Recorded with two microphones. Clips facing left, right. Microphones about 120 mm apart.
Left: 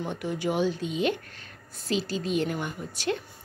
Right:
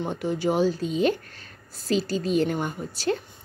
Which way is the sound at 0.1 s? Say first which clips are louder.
Right 4 dB; 30° right (ahead or behind).